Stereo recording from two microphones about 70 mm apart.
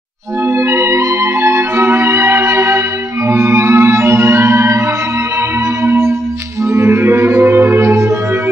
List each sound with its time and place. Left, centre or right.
0.5 s music: right
5.9 s music: right